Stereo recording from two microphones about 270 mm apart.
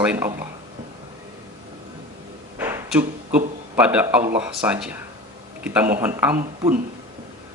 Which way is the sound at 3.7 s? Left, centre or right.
Centre.